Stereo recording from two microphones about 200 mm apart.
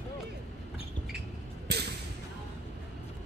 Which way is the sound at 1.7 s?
55° right (ahead or behind).